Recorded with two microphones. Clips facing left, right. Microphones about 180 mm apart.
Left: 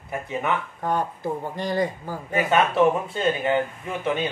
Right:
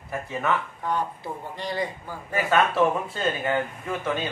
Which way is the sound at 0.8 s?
45° left (ahead or behind).